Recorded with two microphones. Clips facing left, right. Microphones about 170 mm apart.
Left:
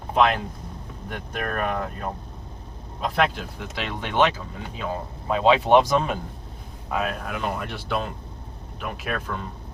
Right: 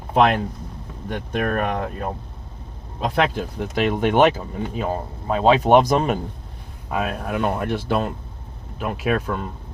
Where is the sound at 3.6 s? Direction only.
50° right (ahead or behind).